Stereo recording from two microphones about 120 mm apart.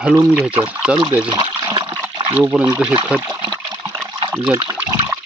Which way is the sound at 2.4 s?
15° right (ahead or behind).